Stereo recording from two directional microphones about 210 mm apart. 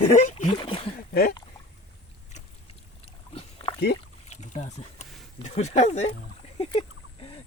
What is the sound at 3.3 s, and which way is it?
Pig, 25° left (ahead or behind).